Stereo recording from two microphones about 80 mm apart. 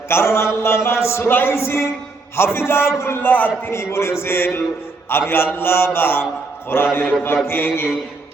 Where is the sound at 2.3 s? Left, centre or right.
Left.